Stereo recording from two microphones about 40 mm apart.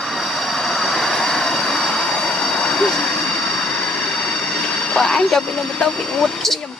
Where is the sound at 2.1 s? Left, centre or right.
Left.